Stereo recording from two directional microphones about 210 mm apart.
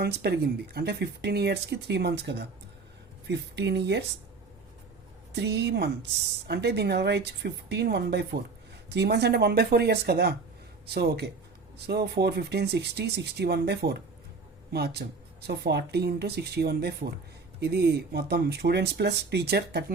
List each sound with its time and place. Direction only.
0.0 s speech: 50° right (ahead or behind)
5.3 s speech: 55° right (ahead or behind)